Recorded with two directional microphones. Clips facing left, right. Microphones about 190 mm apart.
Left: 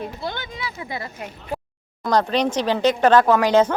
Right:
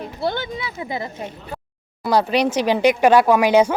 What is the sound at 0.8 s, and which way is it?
Speech, 20° right (ahead or behind).